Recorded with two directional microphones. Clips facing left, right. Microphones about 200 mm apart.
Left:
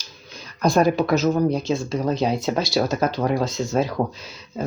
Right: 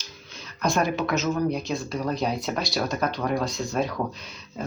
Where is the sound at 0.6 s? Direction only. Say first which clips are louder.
Left 6 dB; 40° left (ahead or behind).